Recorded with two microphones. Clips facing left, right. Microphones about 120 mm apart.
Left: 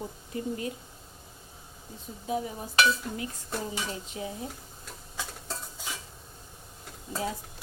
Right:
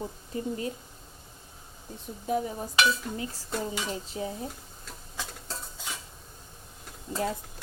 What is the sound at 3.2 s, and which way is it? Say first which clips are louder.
Dishes: right 2 dB; 30° right (ahead or behind).